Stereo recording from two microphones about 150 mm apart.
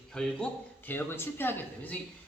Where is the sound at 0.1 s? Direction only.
5° left (ahead or behind).